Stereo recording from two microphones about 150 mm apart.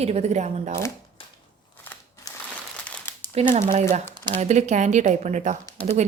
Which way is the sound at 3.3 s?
45° right (ahead or behind).